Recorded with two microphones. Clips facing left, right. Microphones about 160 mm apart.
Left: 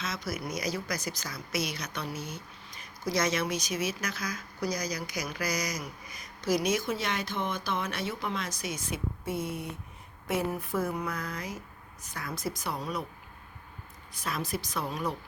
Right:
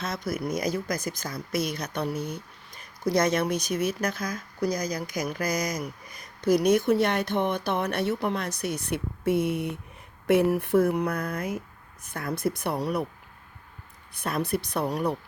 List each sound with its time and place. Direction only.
0.0 s speech: 55° right (ahead or behind)
14.1 s speech: 60° right (ahead or behind)